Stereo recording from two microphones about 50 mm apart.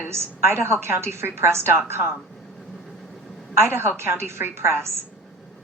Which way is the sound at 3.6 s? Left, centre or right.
Right.